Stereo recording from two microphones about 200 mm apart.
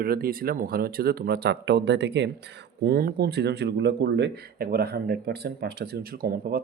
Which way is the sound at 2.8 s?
50° right (ahead or behind).